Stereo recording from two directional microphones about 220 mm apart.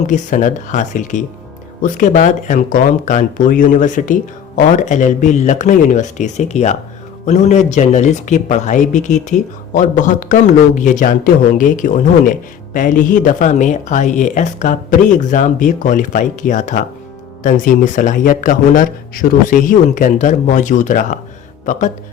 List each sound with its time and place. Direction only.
0.1 s speech: 35° left (ahead or behind)